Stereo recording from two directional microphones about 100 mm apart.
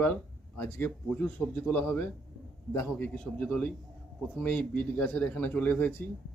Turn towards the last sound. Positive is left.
turn(degrees=20)  # may be behind; listen again after turning